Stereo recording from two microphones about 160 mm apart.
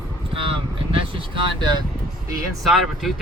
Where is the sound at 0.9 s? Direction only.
30° right (ahead or behind).